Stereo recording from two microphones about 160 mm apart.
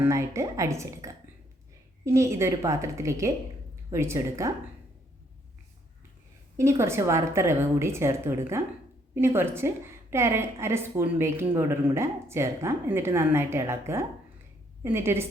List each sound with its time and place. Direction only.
0.0 s a woman's voice: 20° right (ahead or behind)
6.6 s a woman's voice: 15° right (ahead or behind)